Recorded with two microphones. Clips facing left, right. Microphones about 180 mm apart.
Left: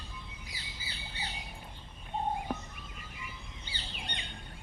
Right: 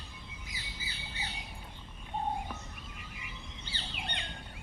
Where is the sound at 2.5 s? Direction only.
45° left (ahead or behind).